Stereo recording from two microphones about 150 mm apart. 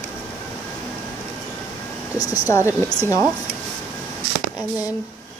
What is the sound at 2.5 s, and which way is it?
Speech, 20° left (ahead or behind).